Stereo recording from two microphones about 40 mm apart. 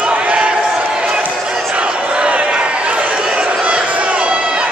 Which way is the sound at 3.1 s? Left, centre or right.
Right.